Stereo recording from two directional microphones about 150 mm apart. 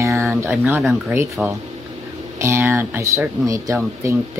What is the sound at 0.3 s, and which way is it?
Speech, 5° right (ahead or behind).